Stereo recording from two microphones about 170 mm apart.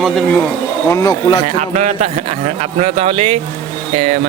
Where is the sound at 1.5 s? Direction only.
45° right (ahead or behind).